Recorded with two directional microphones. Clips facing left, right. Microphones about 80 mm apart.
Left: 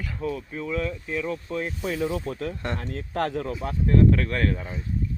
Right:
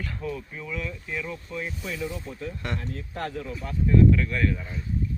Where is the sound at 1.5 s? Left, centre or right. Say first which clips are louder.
Left 3 dB; left.